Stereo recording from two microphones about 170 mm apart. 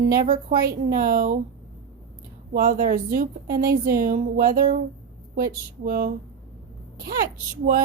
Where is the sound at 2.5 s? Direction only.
55° right (ahead or behind).